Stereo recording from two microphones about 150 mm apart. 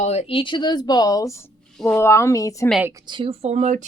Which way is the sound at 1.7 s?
5° left (ahead or behind).